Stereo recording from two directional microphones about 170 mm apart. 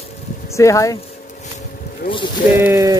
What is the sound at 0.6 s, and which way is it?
Speech, 20° left (ahead or behind).